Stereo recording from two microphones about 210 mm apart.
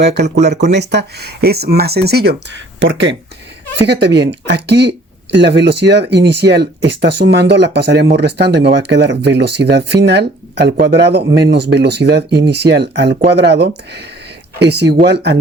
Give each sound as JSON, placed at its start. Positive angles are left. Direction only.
{"t": 0.0, "sound": "speech", "side_deg": -55}